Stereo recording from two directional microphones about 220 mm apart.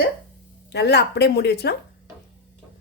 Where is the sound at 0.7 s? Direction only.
50° left (ahead or behind).